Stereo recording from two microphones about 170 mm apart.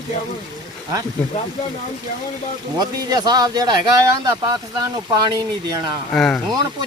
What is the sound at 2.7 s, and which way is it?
Speech, 25° right (ahead or behind).